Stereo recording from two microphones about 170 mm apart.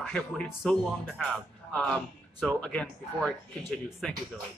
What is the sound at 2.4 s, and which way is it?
Speech, 5° left (ahead or behind).